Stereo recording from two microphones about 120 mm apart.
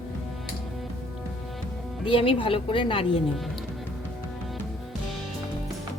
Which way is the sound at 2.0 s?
45° left (ahead or behind).